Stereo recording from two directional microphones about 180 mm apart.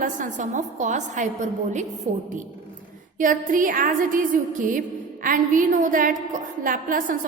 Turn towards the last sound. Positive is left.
turn(degrees=-50)  # may be behind; listen again after turning